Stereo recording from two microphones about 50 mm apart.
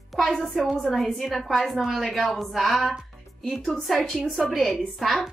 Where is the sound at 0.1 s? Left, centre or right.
Centre.